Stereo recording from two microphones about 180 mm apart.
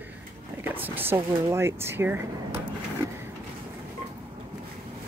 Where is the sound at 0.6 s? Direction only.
10° right (ahead or behind).